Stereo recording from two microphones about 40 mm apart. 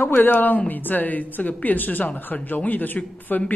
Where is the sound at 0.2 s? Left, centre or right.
Left.